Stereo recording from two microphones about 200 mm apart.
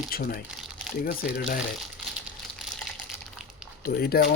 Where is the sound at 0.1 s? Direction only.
50° left (ahead or behind).